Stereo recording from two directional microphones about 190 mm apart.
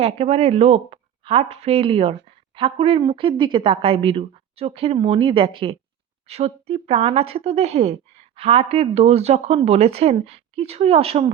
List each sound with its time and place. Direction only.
0.0 s a woman's voice: 35° right (ahead or behind)